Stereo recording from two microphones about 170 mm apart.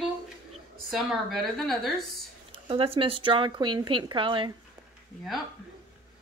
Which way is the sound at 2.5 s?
30° right (ahead or behind).